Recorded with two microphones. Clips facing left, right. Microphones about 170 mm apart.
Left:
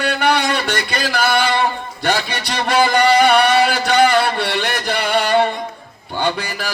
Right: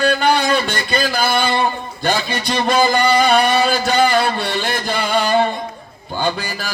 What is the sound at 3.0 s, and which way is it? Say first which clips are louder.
Speech: left 1 dB; 70° left (ahead or behind).